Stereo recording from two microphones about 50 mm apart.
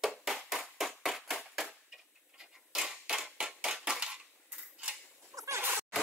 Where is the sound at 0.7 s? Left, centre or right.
Centre.